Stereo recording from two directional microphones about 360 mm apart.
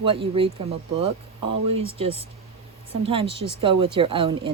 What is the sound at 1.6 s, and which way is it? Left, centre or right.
Speech, centre.